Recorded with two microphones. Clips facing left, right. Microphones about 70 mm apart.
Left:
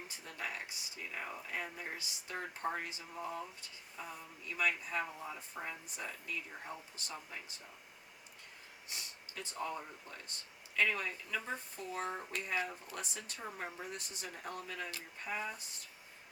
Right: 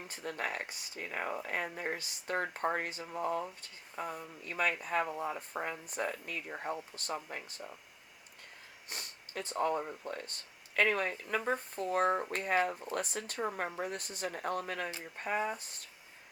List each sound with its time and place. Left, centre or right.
0.1 s speech: right
8.9 s speech: right